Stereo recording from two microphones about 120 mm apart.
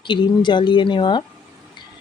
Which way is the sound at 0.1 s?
40° left (ahead or behind).